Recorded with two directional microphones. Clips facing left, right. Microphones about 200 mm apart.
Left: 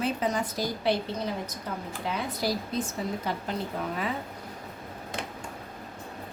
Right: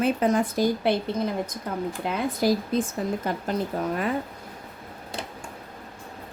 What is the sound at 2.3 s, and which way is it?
Speech, 50° right (ahead or behind).